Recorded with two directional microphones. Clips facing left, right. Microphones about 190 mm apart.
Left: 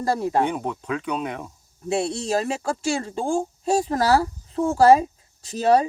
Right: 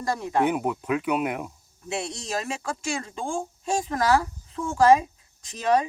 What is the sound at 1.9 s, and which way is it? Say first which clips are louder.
Speech: left 7 dB; 30° left (ahead or behind).